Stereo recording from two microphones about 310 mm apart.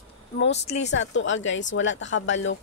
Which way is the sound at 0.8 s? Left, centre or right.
Left.